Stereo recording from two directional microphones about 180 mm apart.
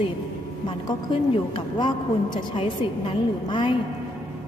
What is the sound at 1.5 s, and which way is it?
A woman's voice, 25° left (ahead or behind).